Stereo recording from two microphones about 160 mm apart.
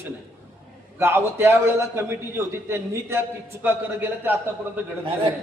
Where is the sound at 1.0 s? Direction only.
15° right (ahead or behind).